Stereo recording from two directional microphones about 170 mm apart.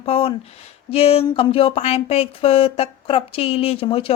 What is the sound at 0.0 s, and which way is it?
Speech, 35° left (ahead or behind).